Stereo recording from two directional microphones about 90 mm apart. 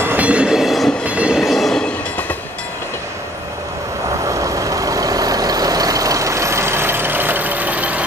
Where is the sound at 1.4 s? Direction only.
Centre (ahead or behind).